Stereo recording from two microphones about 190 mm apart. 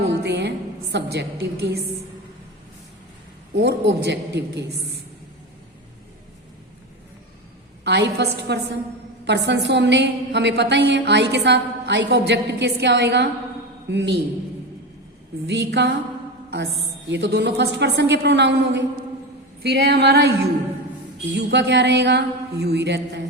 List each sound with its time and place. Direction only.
0.2 s music: 60° right (ahead or behind)
3.5 s a woman's voice: 65° right (ahead or behind)
7.9 s a woman's voice: 60° right (ahead or behind)
15.4 s a woman's voice: 60° right (ahead or behind)
17.1 s a woman's voice: 65° right (ahead or behind)
21.3 s a woman's voice: 60° right (ahead or behind)